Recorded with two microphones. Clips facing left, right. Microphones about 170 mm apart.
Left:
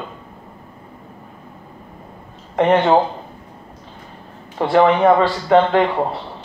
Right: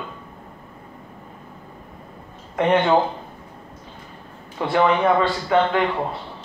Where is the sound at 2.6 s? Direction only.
30° left (ahead or behind).